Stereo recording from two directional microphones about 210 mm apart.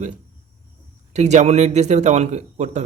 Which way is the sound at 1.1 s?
35° right (ahead or behind).